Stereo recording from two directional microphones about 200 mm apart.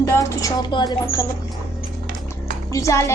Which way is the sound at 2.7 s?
15° left (ahead or behind).